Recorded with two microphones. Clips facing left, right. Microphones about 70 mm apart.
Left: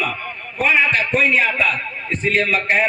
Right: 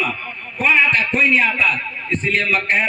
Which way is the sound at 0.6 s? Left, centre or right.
Centre.